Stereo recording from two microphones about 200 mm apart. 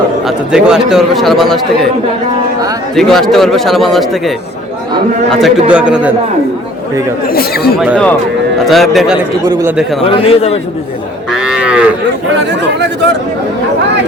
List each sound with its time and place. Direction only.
0.3 s a man's voice: 5° right (ahead or behind)
2.9 s a man's voice: centre (ahead or behind)
5.3 s a man's voice: 5° right (ahead or behind)
7.3 s speech: 50° left (ahead or behind)
8.6 s a man's voice: centre (ahead or behind)
9.4 s a man's voice: 15° right (ahead or behind)
10.0 s a man's voice: 25° left (ahead or behind)
11.3 s moo: 5° right (ahead or behind)
12.4 s speech: 60° right (ahead or behind)